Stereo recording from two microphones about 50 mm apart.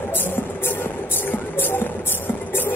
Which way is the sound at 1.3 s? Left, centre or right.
Left.